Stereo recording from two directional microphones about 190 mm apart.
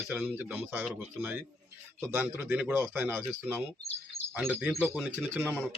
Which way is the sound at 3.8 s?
35° left (ahead or behind).